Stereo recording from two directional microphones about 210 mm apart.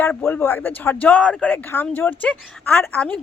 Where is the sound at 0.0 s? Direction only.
5° left (ahead or behind).